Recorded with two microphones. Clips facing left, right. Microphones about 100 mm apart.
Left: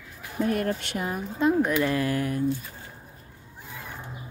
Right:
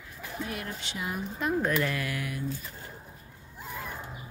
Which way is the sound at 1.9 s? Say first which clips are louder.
Left 8 dB; 35° left (ahead or behind).